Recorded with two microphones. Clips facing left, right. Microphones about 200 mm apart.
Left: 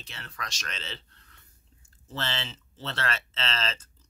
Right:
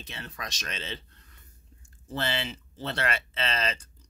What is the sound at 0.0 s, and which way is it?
Speech, 20° right (ahead or behind).